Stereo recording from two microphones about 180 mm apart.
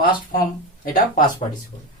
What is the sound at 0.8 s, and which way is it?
Speech, 50° left (ahead or behind).